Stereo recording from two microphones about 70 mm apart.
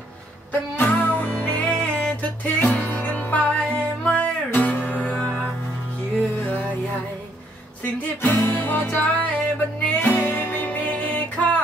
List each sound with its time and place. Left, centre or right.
0.5 s music: left
7.8 s music: left